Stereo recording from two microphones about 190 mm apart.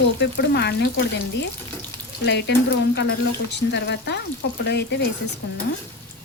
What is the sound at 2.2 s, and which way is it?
Speech, 65° left (ahead or behind).